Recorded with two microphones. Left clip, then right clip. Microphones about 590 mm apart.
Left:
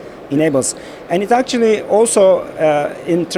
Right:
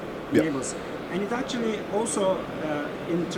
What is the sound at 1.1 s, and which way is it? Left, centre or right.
Speech, left.